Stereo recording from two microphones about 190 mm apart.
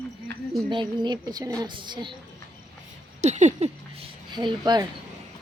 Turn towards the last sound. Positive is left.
turn(degrees=-25)  # may be behind; listen again after turning